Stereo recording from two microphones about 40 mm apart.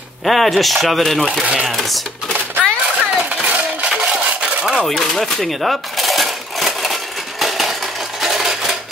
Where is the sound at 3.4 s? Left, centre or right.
Right.